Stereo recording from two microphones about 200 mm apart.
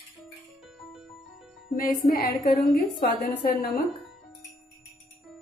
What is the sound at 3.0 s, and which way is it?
Speech, 45° left (ahead or behind).